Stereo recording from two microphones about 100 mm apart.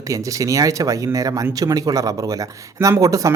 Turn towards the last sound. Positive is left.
turn(degrees=-35)  # may be behind; listen again after turning